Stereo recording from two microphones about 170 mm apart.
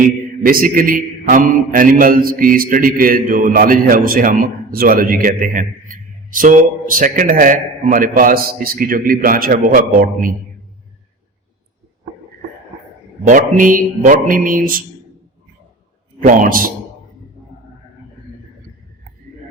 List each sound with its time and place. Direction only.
0.4 s a man's voice: 55° right (ahead or behind)
13.2 s mantra: 50° right (ahead or behind)
16.2 s mantra: 50° right (ahead or behind)